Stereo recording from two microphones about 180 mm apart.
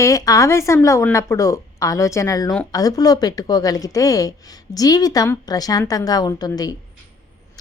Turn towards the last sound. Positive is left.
turn(degrees=20)  # may be behind; listen again after turning